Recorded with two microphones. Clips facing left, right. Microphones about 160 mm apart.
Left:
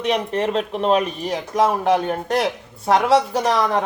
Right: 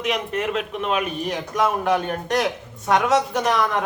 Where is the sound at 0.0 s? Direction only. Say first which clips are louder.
Left 4 dB; 35° left (ahead or behind).